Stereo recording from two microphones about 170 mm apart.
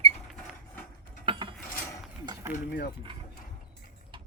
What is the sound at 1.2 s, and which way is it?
Filing, 30° right (ahead or behind).